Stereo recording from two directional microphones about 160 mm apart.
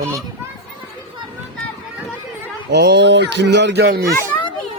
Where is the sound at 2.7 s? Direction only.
90° right.